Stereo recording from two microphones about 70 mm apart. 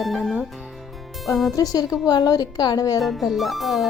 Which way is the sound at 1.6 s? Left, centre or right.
Left.